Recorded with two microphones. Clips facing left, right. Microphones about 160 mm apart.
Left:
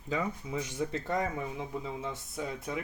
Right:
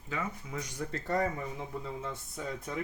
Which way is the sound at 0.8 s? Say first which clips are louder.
Right 1 dB; 5° left (ahead or behind).